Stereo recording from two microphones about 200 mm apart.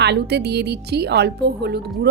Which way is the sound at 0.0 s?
55° right (ahead or behind).